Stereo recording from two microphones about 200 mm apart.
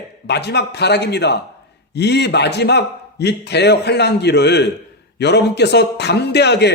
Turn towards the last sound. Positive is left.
turn(degrees=55)  # may be behind; listen again after turning